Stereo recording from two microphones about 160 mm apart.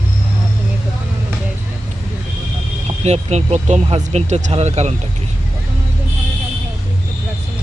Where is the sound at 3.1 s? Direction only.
45° right (ahead or behind).